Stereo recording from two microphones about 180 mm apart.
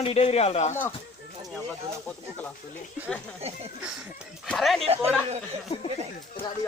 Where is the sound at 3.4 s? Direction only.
35° right (ahead or behind).